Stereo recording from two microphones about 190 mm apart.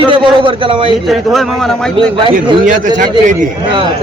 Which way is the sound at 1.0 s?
Centre (ahead or behind).